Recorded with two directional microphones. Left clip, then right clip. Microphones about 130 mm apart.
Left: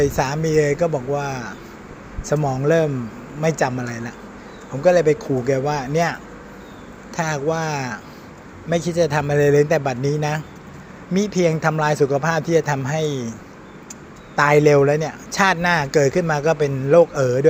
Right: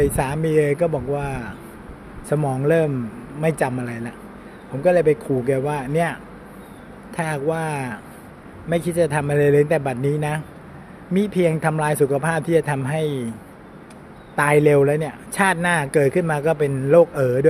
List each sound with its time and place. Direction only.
0.0 s speech: 25° right (ahead or behind)
7.2 s speech: 25° right (ahead or behind)
14.3 s speech: 25° right (ahead or behind)